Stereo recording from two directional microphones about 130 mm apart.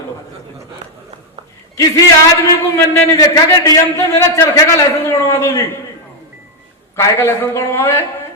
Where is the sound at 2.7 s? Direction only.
25° left (ahead or behind).